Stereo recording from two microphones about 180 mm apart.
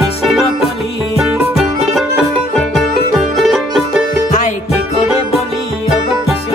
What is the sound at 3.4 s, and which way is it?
Music, centre (ahead or behind).